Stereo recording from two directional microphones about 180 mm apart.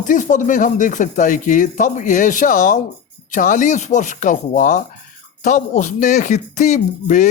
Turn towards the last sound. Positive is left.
turn(degrees=40)  # may be behind; listen again after turning